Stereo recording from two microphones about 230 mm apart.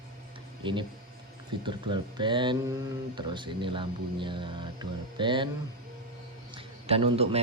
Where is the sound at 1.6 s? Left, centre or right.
Centre.